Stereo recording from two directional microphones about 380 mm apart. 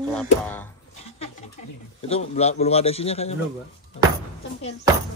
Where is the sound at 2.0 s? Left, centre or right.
Centre.